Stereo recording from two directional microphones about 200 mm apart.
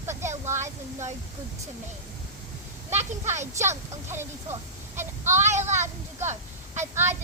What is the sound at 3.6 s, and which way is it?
Speech, 15° right (ahead or behind).